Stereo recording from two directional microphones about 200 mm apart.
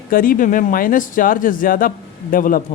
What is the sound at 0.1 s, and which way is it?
A man's voice, 45° left (ahead or behind).